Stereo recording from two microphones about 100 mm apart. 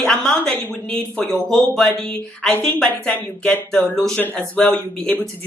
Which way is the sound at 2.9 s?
15° left (ahead or behind).